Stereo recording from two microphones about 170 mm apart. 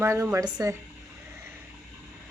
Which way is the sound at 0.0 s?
15° right (ahead or behind).